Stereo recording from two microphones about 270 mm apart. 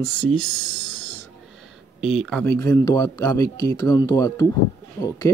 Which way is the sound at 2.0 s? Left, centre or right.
Centre.